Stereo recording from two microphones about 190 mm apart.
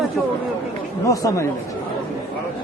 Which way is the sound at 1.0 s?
15° left (ahead or behind).